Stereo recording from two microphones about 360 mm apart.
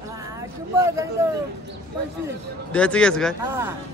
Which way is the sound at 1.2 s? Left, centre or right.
Centre.